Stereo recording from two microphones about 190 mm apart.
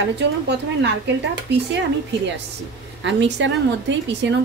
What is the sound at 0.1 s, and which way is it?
Speech, 65° right (ahead or behind).